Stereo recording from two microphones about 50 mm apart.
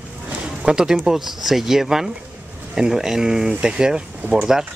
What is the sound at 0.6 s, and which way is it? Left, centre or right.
Speech, centre.